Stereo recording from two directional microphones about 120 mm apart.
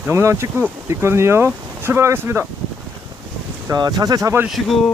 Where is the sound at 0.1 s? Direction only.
20° right (ahead or behind).